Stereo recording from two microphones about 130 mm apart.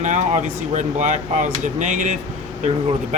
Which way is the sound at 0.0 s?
70° right (ahead or behind).